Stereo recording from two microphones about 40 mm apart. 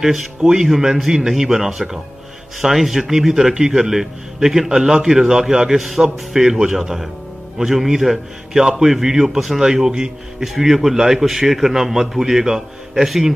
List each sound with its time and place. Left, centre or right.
0.0 s a man's voice: centre
10.4 s a man's voice: centre